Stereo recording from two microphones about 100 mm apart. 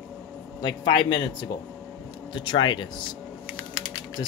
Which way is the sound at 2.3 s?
55° left (ahead or behind).